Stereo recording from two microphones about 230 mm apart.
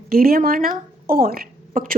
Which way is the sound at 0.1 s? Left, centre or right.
Right.